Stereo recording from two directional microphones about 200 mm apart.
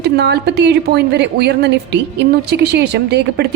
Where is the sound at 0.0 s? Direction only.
55° right (ahead or behind).